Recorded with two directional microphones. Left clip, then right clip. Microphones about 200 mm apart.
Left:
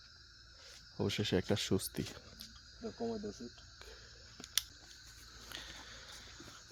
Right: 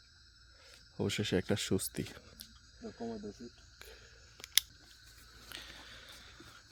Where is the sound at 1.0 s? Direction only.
20° right (ahead or behind).